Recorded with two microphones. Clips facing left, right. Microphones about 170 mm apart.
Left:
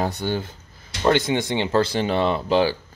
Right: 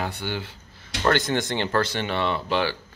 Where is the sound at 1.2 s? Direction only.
Centre (ahead or behind).